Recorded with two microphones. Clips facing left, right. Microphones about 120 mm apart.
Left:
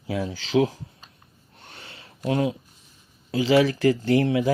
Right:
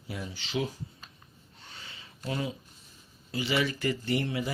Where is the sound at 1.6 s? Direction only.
60° left (ahead or behind).